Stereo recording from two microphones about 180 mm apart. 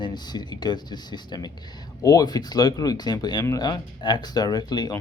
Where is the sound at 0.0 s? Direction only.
25° left (ahead or behind).